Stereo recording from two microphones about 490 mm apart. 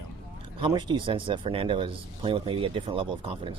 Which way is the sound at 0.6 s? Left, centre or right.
Centre.